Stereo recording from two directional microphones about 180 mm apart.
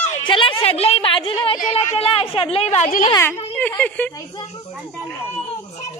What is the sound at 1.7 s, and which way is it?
A woman's voice, 35° left (ahead or behind).